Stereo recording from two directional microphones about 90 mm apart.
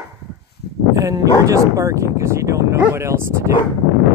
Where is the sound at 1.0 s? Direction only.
40° right (ahead or behind).